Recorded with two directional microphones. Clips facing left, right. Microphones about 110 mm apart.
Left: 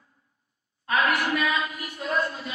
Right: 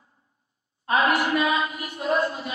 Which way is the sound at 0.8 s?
25° right (ahead or behind).